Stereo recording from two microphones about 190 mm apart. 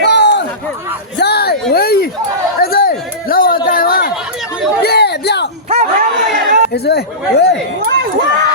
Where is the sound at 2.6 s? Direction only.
55° left (ahead or behind).